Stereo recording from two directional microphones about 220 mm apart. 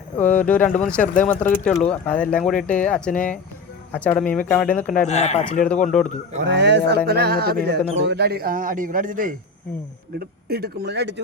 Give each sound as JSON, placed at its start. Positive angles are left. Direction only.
{"t": 0.2, "sound": "speech", "side_deg": 5}
{"t": 1.0, "sound": "speech", "side_deg": 35}
{"t": 1.6, "sound": "speech", "side_deg": 5}
{"t": 4.9, "sound": "speech", "side_deg": 30}
{"t": 5.9, "sound": "speech", "side_deg": 5}
{"t": 6.4, "sound": "speech", "side_deg": -50}